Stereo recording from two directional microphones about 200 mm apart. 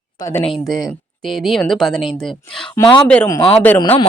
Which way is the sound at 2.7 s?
20° left (ahead or behind).